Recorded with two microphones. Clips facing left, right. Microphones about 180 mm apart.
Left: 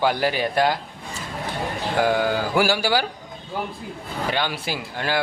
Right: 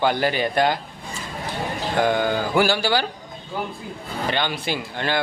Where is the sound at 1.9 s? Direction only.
5° left (ahead or behind).